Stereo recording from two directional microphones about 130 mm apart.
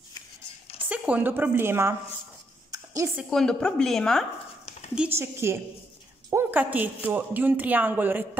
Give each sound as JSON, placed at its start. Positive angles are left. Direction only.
{"t": 0.8, "sound": "speech", "side_deg": -10}
{"t": 2.7, "sound": "a sound", "side_deg": -25}
{"t": 3.3, "sound": "speech", "side_deg": 5}
{"t": 5.1, "sound": "a woman's voice", "side_deg": -20}